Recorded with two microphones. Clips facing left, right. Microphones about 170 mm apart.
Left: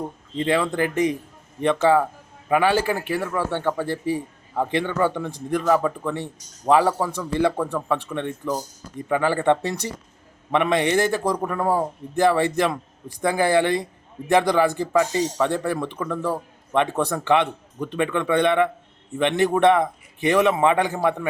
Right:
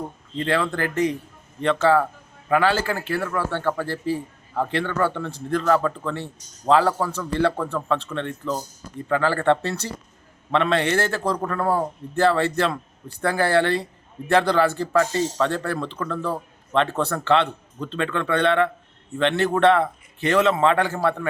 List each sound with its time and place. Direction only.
0.3 s a man's voice: 15° left (ahead or behind)